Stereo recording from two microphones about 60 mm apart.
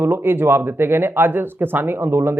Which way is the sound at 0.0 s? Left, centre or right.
Right.